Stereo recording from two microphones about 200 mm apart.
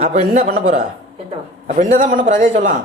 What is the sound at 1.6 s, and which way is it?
A woman's voice, 40° right (ahead or behind).